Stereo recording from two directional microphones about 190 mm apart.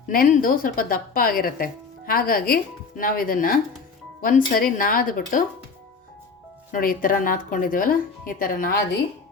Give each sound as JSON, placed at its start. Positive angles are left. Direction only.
{"t": 0.1, "sound": "speech", "side_deg": 45}
{"t": 6.7, "sound": "speech", "side_deg": 45}